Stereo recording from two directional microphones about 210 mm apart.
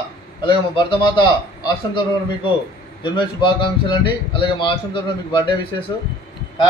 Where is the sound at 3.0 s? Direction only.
20° left (ahead or behind).